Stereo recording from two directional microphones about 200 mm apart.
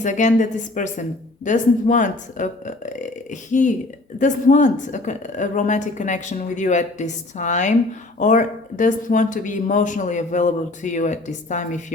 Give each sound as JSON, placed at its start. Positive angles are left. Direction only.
{"t": 0.0, "sound": "speech", "side_deg": 40}